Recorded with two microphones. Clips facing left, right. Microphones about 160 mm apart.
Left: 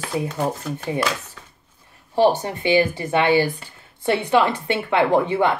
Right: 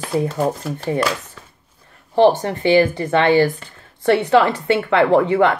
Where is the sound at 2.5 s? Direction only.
10° left (ahead or behind).